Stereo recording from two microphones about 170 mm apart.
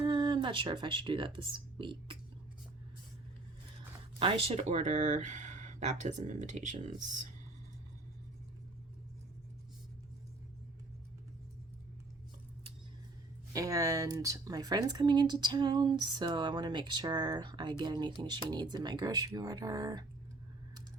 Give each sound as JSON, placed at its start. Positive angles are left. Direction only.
{"t": 0.0, "sound": "speech", "side_deg": -30}
{"t": 4.2, "sound": "speech", "side_deg": -35}
{"t": 13.5, "sound": "speech", "side_deg": -20}